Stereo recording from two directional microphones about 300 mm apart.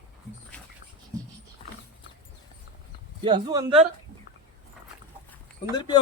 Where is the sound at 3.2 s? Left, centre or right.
Centre.